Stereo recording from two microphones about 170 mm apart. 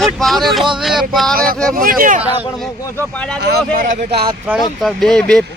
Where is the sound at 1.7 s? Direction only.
55° right (ahead or behind).